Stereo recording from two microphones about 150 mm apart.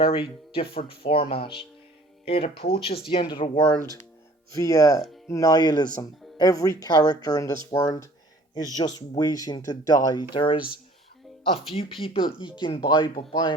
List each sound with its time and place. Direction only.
0.0 s speech: 40° left (ahead or behind)
4.5 s speech: 20° left (ahead or behind)
11.7 s speech: 40° left (ahead or behind)